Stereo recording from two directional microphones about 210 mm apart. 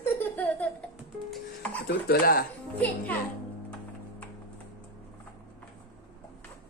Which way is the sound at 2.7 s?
10° left (ahead or behind).